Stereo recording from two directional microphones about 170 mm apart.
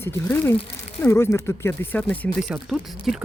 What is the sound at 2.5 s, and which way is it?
Speech, centre (ahead or behind).